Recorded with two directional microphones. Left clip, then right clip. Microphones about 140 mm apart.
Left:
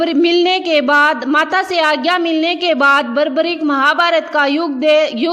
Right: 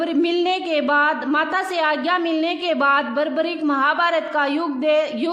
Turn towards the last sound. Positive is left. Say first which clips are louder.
# left 7 dB
turn(degrees=35)  # may be behind; listen again after turning